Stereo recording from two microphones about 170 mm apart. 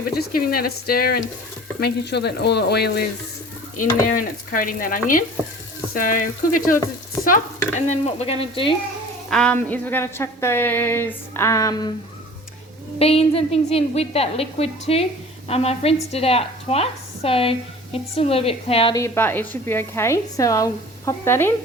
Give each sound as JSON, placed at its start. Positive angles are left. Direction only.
{"t": 0.1, "sound": "speech", "side_deg": 60}
{"t": 1.8, "sound": "speech", "side_deg": 75}
{"t": 3.8, "sound": "speech", "side_deg": 55}
{"t": 7.8, "sound": "a woman's voice", "side_deg": 40}
{"t": 9.3, "sound": "a woman's voice", "side_deg": 5}
{"t": 13.0, "sound": "a woman's voice", "side_deg": 35}
{"t": 18.9, "sound": "a woman's voice", "side_deg": 15}